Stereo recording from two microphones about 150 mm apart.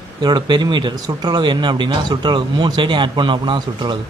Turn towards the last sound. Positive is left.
turn(degrees=-30)  # may be behind; listen again after turning